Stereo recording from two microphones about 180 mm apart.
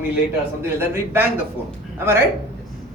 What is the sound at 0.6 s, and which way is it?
Speech, 15° right (ahead or behind).